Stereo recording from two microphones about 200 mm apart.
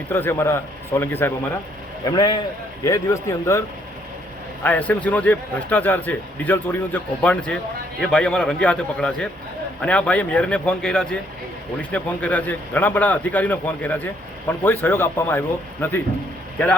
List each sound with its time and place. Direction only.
0.1 s a man's voice: 10° left (ahead or behind)
4.6 s a man's voice: 10° left (ahead or behind)